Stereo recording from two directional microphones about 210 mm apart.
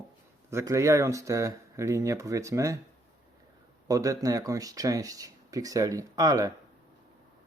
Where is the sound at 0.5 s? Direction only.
15° right (ahead or behind).